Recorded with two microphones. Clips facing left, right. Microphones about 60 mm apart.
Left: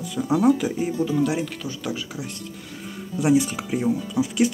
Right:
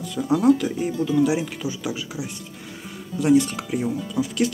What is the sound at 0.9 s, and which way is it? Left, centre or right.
Speech, left.